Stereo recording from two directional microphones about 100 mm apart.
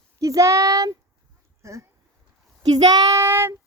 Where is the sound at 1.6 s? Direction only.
30° right (ahead or behind).